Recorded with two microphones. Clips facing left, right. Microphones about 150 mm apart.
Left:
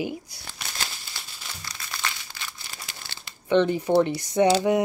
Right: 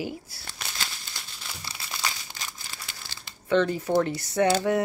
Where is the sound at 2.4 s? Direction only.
40° right (ahead or behind).